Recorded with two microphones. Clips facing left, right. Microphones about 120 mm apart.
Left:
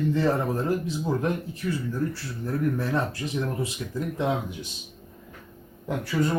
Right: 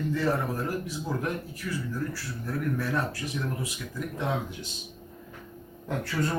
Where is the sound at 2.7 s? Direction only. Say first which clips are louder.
Left 2 dB; 25° left (ahead or behind).